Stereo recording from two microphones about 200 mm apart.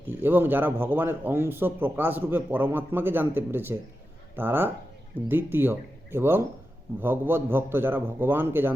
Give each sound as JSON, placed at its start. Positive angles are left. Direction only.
{"t": 0.1, "sound": "a man's voice", "side_deg": -10}